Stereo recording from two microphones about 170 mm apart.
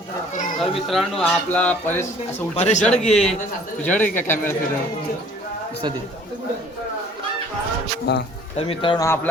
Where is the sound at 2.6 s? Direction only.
40° left (ahead or behind).